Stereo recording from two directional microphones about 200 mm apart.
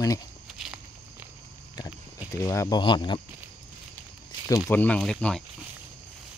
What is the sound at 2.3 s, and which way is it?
Speech, 15° left (ahead or behind).